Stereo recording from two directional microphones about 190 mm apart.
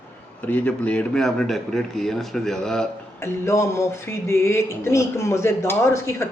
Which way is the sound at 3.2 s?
15° left (ahead or behind).